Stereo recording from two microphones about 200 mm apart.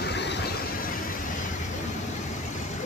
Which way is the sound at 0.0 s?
55° left (ahead or behind).